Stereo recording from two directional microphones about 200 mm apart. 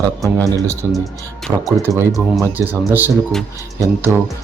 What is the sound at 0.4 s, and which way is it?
Speech, 15° right (ahead or behind).